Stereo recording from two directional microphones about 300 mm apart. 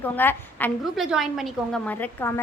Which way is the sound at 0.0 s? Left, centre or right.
Centre.